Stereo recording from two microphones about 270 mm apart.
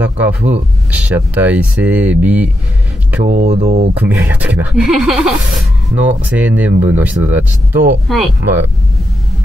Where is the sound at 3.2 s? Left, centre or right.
Right.